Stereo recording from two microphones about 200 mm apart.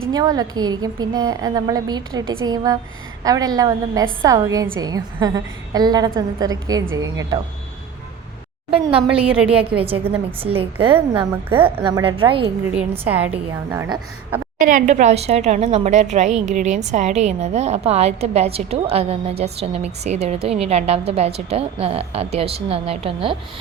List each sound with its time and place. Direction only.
0.0 s a woman's voice: 20° right (ahead or behind)
9.5 s a woman's voice: 25° right (ahead or behind)
10.9 s a woman's voice: 10° right (ahead or behind)
11.5 s a woman's voice: 25° right (ahead or behind)
13.1 s a woman's voice: 10° right (ahead or behind)
14.6 s a woman's voice: 40° right (ahead or behind)